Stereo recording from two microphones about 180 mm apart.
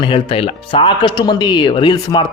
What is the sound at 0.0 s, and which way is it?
Speech, 30° left (ahead or behind).